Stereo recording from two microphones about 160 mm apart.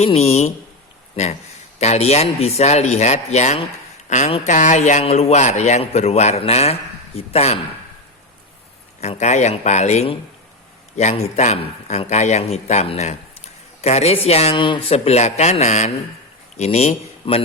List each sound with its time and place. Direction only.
0.0 s a man's voice: 40° left (ahead or behind)
9.0 s a man's voice: 45° left (ahead or behind)